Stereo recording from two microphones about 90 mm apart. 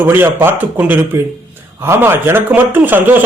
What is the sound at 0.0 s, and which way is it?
Speech, 25° right (ahead or behind).